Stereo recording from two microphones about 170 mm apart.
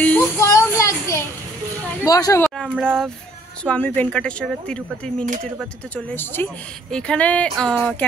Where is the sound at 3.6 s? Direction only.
10° left (ahead or behind).